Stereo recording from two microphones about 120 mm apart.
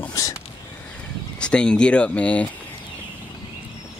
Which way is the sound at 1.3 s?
10° left (ahead or behind).